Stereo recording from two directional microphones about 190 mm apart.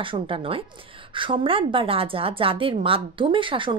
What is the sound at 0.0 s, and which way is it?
A woman's voice, 25° right (ahead or behind).